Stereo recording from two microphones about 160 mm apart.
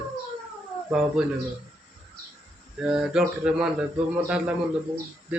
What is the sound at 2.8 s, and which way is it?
A man's voice, 5° right (ahead or behind).